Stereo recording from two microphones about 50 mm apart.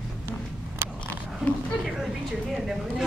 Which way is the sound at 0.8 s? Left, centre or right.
Right.